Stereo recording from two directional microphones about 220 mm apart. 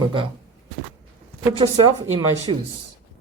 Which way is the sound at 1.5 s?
20° right (ahead or behind).